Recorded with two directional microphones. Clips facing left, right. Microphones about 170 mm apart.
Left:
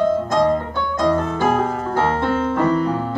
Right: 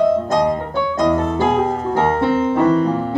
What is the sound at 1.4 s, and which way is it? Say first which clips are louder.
Music: right 2 dB; 15° right (ahead or behind).